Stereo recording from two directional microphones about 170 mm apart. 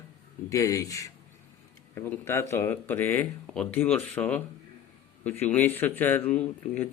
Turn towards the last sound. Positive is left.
turn(degrees=10)  # may be behind; listen again after turning